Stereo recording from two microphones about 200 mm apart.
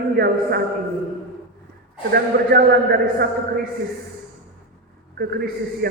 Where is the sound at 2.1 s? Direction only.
50° right (ahead or behind).